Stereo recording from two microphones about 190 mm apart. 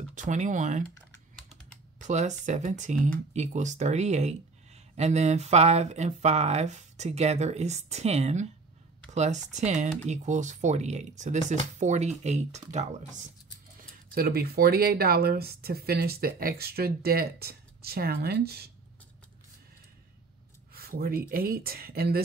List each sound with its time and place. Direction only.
0.1 s speech: 40° right (ahead or behind)
1.5 s typing: 40° right (ahead or behind)
3.3 s speech: 40° right (ahead or behind)
14.1 s speech: 55° right (ahead or behind)
20.7 s speech: 50° right (ahead or behind)